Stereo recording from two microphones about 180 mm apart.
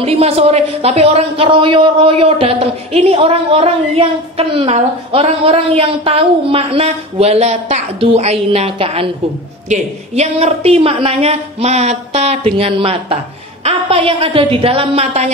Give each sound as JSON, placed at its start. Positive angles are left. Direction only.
{"t": 0.0, "sound": "speech", "side_deg": -35}